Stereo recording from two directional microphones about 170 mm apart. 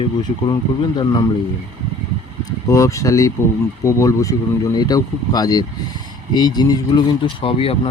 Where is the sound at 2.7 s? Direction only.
20° left (ahead or behind).